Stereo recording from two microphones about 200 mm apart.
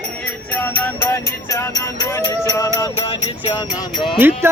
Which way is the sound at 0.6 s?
10° left (ahead or behind).